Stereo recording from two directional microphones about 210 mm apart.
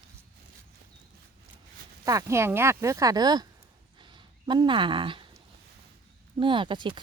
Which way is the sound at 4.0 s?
20° right (ahead or behind).